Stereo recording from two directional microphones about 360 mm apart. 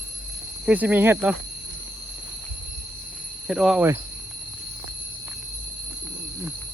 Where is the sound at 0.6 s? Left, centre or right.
Centre.